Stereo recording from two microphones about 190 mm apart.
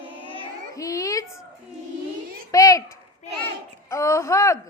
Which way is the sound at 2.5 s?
20° left (ahead or behind).